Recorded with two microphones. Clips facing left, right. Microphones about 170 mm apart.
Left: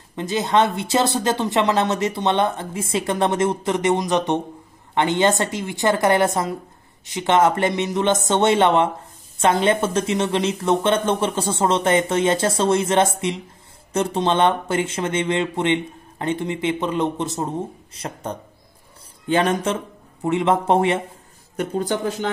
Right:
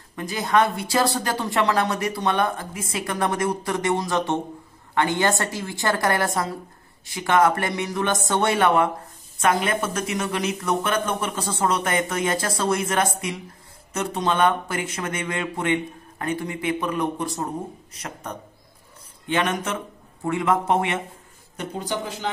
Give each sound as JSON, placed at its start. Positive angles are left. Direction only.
{"t": 0.1, "sound": "speech", "side_deg": 25}
{"t": 21.5, "sound": "speech", "side_deg": 50}